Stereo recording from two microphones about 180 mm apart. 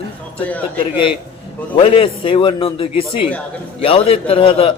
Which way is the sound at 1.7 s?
30° left (ahead or behind).